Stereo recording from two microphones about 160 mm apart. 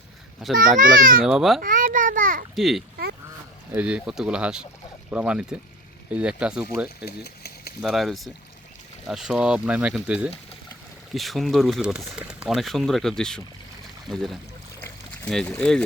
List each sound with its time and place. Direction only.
0.4 s speech: centre (ahead or behind)
0.8 s a child's voice: 60° right (ahead or behind)
1.2 s speech: 5° right (ahead or behind)
1.6 s a sound: 55° right (ahead or behind)
2.6 s speech: centre (ahead or behind)
6.8 s speech: 80° left
7.8 s speech: centre (ahead or behind)
14.8 s pour: 10° left (ahead or behind)